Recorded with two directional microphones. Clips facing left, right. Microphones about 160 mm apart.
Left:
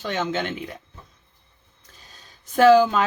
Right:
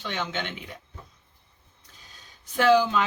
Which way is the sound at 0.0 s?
45° left (ahead or behind).